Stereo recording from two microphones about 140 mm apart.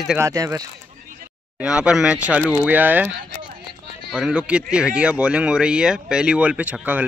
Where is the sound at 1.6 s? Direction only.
5° right (ahead or behind).